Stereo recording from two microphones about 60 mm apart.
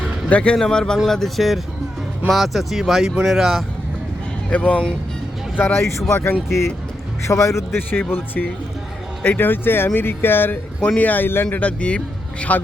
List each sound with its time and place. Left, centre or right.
0.3 s speech: left; by 3.6 s centre
4.4 s speech: left
5.5 s speech: left
7.3 s a man's voice: left
7.8 s speech: left
11.5 s speech: left